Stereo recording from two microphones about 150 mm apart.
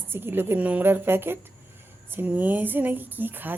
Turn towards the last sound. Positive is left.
turn(degrees=-10)  # may be behind; listen again after turning